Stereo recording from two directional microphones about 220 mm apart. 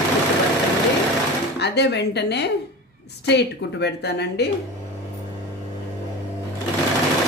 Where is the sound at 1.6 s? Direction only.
50° left (ahead or behind).